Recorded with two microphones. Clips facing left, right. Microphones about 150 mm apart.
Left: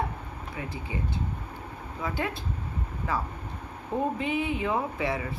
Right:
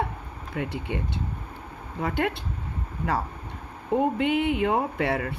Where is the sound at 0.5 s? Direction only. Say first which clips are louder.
Right 8 dB; 70° right (ahead or behind).